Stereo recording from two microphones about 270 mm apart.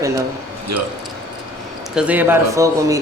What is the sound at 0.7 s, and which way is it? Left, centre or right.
Speech, right.